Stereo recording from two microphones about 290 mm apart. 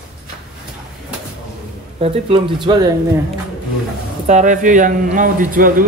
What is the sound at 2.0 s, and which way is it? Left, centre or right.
Speech, centre.